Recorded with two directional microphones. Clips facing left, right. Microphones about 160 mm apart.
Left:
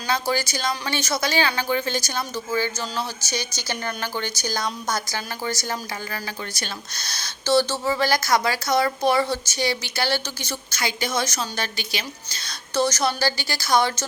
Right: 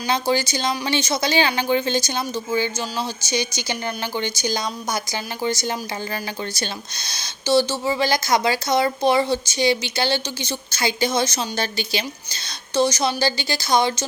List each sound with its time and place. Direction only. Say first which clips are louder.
0.1 s speech: right 3 dB; 20° right (ahead or behind)
12.7 s speech: right 2 dB; 15° right (ahead or behind)